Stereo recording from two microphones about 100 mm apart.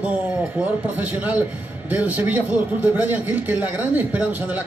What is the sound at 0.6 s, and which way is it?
A man's voice, 15° right (ahead or behind).